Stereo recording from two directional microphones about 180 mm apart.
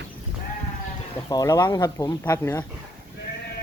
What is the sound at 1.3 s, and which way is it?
Speech, 20° left (ahead or behind).